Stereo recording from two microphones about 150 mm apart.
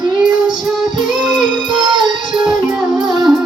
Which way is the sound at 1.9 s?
30° right (ahead or behind).